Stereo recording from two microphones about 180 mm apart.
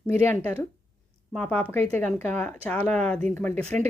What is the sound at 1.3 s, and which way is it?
Speech, 5° left (ahead or behind).